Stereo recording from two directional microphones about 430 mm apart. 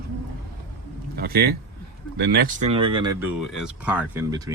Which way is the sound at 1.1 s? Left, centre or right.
Right.